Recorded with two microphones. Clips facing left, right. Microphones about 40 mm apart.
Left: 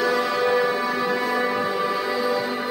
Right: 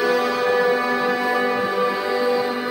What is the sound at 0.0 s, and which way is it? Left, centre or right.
Music, centre.